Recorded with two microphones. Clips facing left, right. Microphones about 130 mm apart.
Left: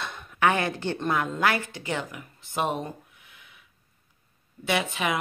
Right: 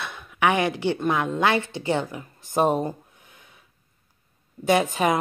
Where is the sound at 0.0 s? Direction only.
5° right (ahead or behind); by 2.2 s 30° right (ahead or behind).